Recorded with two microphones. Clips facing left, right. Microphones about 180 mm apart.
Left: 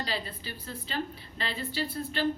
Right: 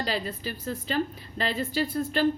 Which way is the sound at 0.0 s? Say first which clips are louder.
Right 5 dB; 45° right (ahead or behind).